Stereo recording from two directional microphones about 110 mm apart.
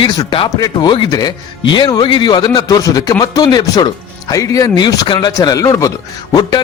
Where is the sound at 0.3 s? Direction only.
45° left (ahead or behind); by 5.9 s 30° left (ahead or behind).